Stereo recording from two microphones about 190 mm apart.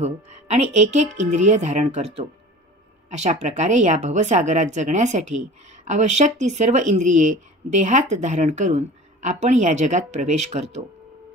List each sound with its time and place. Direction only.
0.0 s a woman's voice: 35° right (ahead or behind)